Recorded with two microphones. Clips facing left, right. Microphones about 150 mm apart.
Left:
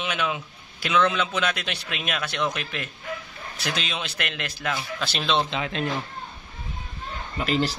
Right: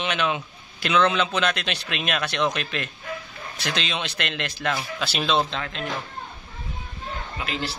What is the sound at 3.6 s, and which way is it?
A man's voice, 5° left (ahead or behind).